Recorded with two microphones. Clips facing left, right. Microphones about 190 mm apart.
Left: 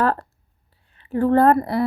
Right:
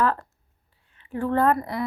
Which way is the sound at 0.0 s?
35° left (ahead or behind).